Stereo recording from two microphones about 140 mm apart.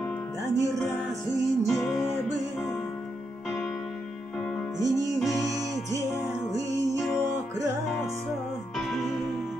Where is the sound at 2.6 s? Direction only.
20° left (ahead or behind).